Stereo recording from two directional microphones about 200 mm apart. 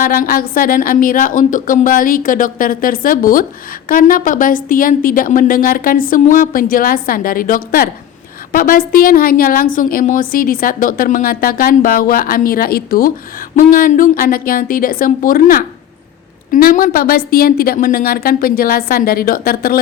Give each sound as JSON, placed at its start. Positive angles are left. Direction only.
{"t": 0.0, "sound": "a woman's voice", "side_deg": 45}